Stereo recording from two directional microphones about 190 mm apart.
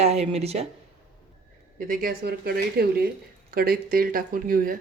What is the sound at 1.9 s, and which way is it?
Speech, 50° right (ahead or behind).